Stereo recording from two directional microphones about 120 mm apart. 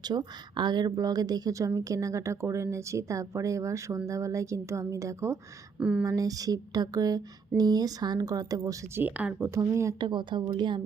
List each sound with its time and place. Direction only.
0.0 s speech: 35° right (ahead or behind)
5.8 s speech: 10° right (ahead or behind)
6.1 s speech: 30° right (ahead or behind)
9.0 s speech: 15° right (ahead or behind)
9.6 s speech: 25° right (ahead or behind)
10.0 s speech: 40° right (ahead or behind)